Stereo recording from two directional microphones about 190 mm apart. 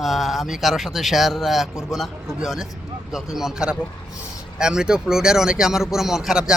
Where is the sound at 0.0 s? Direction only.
Centre (ahead or behind).